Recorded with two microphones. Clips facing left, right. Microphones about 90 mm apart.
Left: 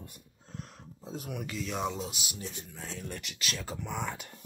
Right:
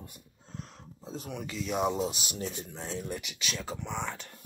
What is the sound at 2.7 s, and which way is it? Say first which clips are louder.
Speech: right 3 dB; 20° right (ahead or behind).